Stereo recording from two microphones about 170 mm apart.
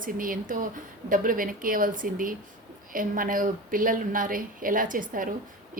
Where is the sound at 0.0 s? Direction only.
55° right (ahead or behind).